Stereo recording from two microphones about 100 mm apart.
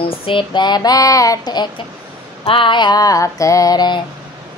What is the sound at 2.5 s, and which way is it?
Female singing, 55° left (ahead or behind).